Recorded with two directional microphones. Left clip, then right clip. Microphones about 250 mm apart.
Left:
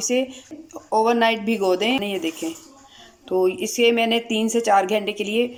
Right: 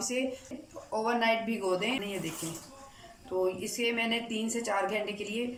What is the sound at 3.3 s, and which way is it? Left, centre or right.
Speech, left.